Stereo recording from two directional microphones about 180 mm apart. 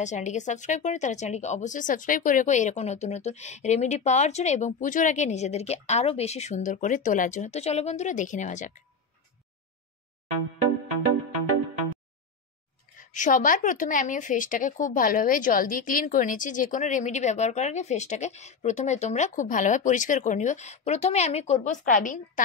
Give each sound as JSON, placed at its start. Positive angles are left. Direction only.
{"t": 0.0, "sound": "speech", "side_deg": 40}
{"t": 13.0, "sound": "a woman's voice", "side_deg": 45}